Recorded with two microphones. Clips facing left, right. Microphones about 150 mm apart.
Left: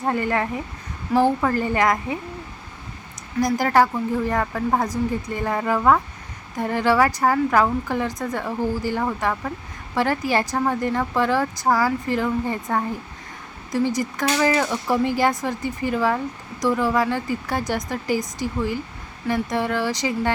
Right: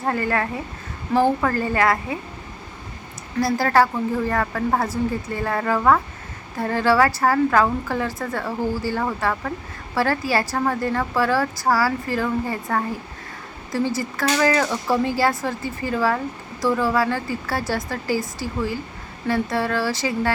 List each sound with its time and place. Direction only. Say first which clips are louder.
0.0 s speech: even; 15° left (ahead or behind)
3.4 s speech: even; 15° left (ahead or behind)